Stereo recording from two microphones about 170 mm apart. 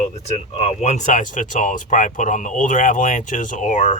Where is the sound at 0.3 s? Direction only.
40° left (ahead or behind).